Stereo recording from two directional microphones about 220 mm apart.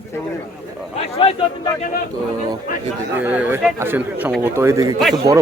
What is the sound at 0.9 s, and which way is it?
Speech, 25° left (ahead or behind).